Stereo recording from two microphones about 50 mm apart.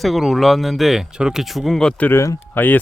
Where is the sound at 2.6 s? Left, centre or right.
Left.